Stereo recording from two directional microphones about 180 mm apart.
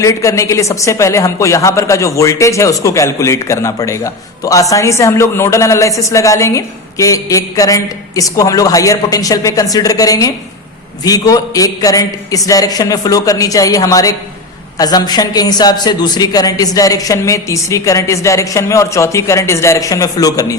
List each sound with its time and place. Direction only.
0.0 s a woman's voice: 15° left (ahead or behind)